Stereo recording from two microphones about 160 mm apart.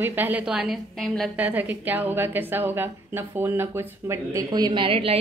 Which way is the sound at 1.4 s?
10° right (ahead or behind).